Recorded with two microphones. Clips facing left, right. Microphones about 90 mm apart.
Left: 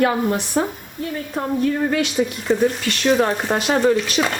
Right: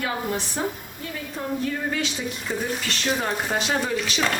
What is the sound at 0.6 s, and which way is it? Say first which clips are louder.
Speech: left 7 dB; 80° left.